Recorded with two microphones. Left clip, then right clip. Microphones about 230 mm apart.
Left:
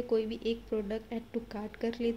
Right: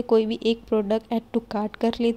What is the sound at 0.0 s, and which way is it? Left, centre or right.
A woman's voice, right.